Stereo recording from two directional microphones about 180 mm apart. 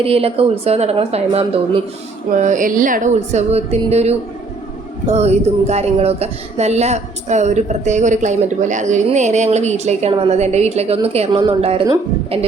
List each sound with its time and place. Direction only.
0.0 s speech: 30° right (ahead or behind)
2.3 s a woman's voice: 45° right (ahead or behind)